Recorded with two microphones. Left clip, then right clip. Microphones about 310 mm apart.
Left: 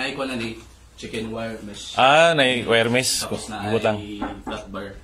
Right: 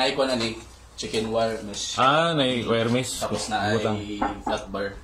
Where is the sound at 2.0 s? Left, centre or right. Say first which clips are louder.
Left 6 dB; left.